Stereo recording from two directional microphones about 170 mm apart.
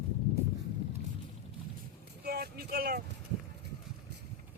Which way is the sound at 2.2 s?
65° right (ahead or behind).